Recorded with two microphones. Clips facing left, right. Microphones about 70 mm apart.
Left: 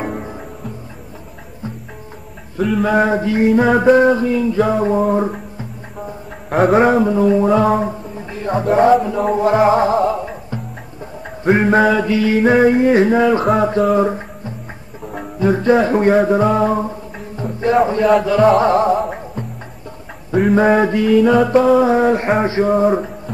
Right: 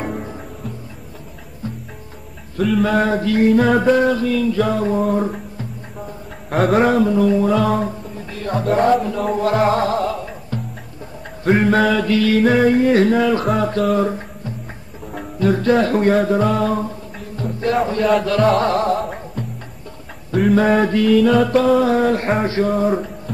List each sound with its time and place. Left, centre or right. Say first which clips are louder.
0.0 s music: left 2 dB; centre
2.6 s chant: even; centre
2.9 s a sound: left 2 dB; centre
6.7 s a man's voice: left 1 dB; centre
8.7 s music: left 4 dB; centre
13.6 s a sound: left 3 dB; left
15.3 s music: left 2 dB; centre
18.0 s chant: left 1 dB; centre
18.6 s music: left 4 dB; centre
18.9 s music: left 3 dB; centre
20.5 s music: left 2 dB; centre